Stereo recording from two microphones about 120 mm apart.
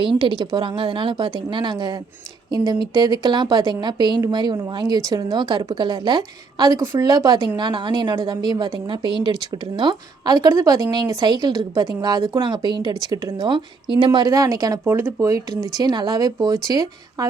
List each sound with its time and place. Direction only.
0.2 s speech: 40° right (ahead or behind)
14.8 s speech: 20° right (ahead or behind)